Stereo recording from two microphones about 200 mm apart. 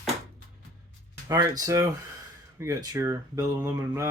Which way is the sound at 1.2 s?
15° right (ahead or behind).